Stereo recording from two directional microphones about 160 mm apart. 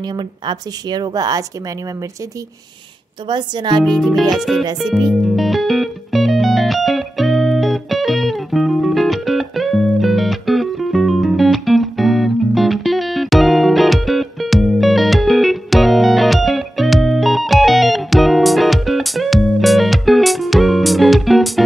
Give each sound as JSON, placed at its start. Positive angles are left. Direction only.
{"t": 0.0, "sound": "speech", "side_deg": -30}
{"t": 3.3, "sound": "speech", "side_deg": -30}
{"t": 3.8, "sound": "speech", "side_deg": 0}
{"t": 5.0, "sound": "music", "side_deg": 0}